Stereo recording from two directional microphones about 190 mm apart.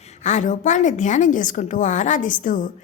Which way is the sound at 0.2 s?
40° left (ahead or behind).